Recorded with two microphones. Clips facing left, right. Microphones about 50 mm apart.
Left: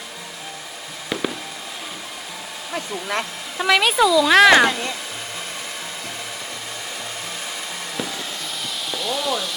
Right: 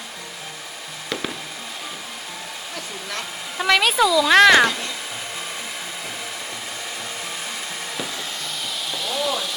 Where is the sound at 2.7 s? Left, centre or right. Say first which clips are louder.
Left 8 dB; left.